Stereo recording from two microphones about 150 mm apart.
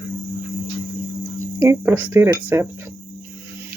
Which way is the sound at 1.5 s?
15° right (ahead or behind).